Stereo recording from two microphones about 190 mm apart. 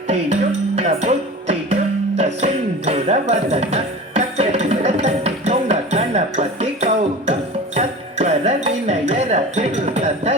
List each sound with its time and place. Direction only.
0.8 s music: 35° right (ahead or behind)